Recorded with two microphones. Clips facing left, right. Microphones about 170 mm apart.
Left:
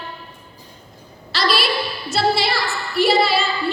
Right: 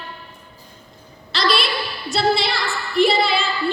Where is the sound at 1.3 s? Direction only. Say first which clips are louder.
Left 1 dB; centre (ahead or behind).